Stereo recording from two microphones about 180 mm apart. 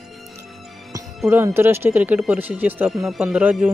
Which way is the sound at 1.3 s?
15° right (ahead or behind).